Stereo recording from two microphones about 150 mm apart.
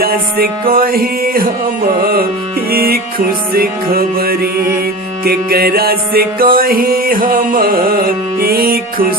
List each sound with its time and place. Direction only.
0.0 s music: 80° right
2.6 s music: 85° right